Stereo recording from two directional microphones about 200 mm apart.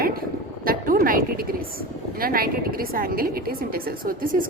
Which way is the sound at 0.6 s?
45° right (ahead or behind).